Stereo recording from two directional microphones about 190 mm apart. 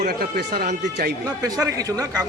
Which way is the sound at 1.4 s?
20° right (ahead or behind).